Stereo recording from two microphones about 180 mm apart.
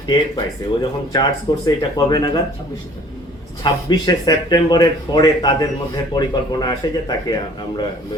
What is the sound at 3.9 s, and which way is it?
Speech, 20° left (ahead or behind).